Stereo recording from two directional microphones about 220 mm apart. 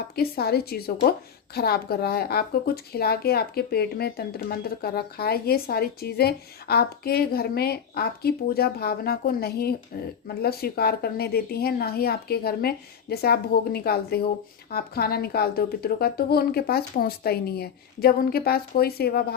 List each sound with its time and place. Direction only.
0.2 s speech: 45° left (ahead or behind)